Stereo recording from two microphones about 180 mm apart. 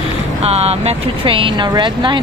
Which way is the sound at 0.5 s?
35° right (ahead or behind).